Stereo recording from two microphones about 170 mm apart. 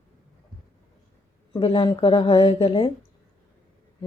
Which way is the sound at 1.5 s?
30° left (ahead or behind).